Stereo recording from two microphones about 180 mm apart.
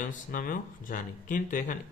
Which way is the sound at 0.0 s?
50° left (ahead or behind).